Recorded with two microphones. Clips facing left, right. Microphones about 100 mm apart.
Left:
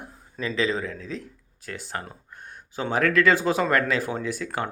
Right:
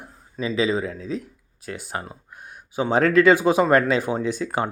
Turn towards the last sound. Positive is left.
turn(degrees=-20)  # may be behind; listen again after turning